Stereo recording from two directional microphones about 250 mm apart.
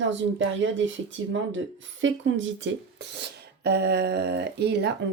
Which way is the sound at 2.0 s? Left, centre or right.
Right.